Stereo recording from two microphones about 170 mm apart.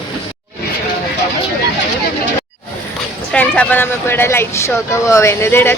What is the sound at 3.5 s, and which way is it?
Speech, 10° left (ahead or behind).